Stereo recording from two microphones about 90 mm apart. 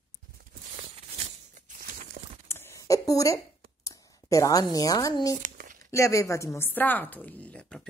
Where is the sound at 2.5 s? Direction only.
30° left (ahead or behind).